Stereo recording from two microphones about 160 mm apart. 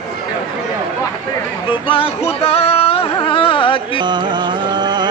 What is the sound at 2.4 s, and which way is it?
Carnatic music, 40° left (ahead or behind).